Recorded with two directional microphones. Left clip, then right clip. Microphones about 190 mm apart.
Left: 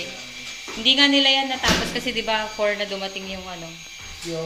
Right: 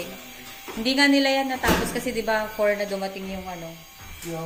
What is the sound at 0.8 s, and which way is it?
Speech, 25° right (ahead or behind).